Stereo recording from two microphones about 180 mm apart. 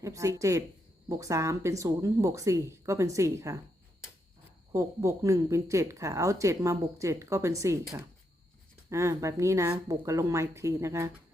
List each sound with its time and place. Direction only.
0.0 s speech: 15° right (ahead or behind)
4.7 s speech: 15° right (ahead or behind)
8.9 s speech: 15° right (ahead or behind)